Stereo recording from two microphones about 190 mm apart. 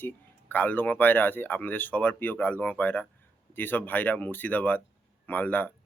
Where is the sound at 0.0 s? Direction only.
10° left (ahead or behind).